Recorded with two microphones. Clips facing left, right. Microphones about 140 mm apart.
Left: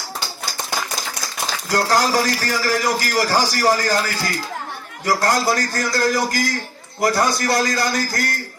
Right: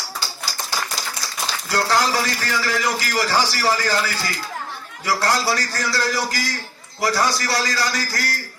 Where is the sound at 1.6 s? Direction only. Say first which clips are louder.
Left 2 dB; 45° left (ahead or behind).